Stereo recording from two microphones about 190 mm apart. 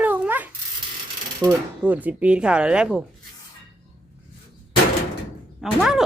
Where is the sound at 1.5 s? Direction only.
10° right (ahead or behind).